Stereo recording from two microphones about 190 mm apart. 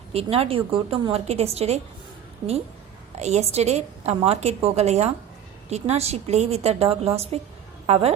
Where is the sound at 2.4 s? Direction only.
20° right (ahead or behind).